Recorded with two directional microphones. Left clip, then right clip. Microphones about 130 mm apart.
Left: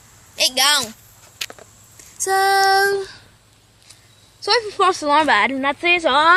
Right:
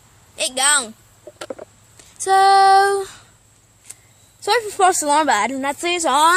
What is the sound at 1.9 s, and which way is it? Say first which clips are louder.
Female singing: right 4 dB; 50° right (ahead or behind).